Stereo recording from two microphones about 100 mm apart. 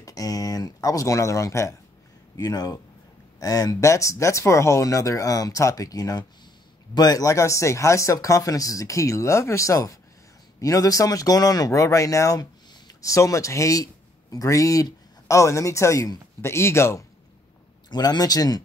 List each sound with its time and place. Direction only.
0.0 s speech: 35° left (ahead or behind)
2.3 s speech: 40° left (ahead or behind); by 17.0 s 25° left (ahead or behind)
17.8 s speech: 45° left (ahead or behind)